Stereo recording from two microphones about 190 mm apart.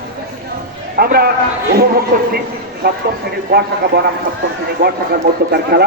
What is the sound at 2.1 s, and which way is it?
Speech, 45° right (ahead or behind).